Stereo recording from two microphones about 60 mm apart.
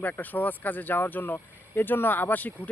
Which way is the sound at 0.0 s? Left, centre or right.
Left.